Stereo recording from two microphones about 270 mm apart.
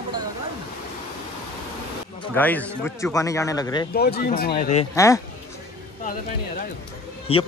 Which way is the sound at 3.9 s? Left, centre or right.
Left.